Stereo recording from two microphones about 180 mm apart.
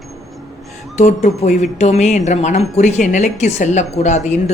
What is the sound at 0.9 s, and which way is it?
Speech, 40° left (ahead or behind).